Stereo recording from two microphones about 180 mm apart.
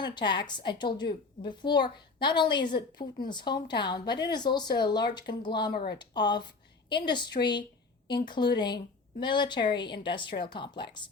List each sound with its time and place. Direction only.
0.0 s a woman's voice: 25° left (ahead or behind)